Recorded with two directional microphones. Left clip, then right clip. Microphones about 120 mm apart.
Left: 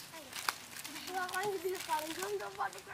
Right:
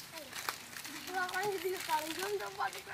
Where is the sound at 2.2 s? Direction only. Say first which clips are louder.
Right 1 dB; 20° right (ahead or behind).